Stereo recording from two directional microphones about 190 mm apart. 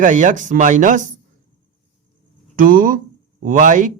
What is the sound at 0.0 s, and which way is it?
Speech, 40° right (ahead or behind).